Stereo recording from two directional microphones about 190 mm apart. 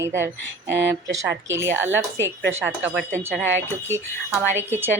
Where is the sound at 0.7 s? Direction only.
70° right (ahead or behind).